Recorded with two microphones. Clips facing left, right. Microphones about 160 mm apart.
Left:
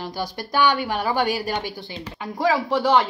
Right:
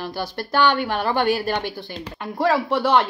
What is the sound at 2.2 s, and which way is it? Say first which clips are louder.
Speech: right 1 dB; 60° right (ahead or behind).